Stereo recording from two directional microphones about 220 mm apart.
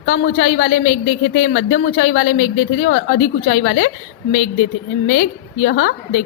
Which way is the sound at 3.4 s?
50° left (ahead or behind).